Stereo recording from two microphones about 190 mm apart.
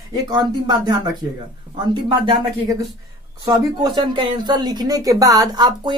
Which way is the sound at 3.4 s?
20° right (ahead or behind).